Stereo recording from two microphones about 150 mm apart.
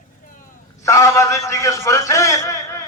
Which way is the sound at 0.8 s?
20° left (ahead or behind).